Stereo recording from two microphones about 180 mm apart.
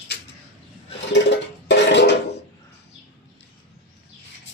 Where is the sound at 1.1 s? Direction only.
75° left (ahead or behind).